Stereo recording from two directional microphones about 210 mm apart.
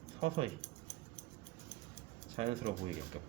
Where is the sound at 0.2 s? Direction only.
30° right (ahead or behind).